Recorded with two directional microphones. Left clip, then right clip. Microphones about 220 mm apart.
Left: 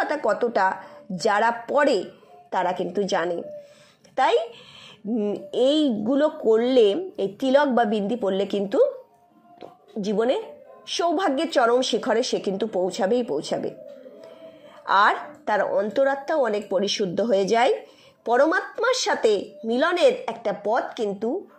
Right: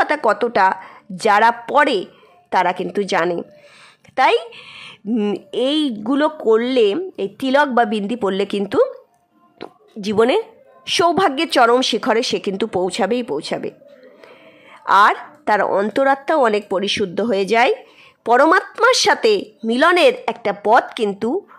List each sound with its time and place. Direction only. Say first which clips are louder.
0.0 s a woman's voice: right 6 dB; 25° right (ahead or behind)
14.9 s a woman's voice: right 6 dB; 25° right (ahead or behind)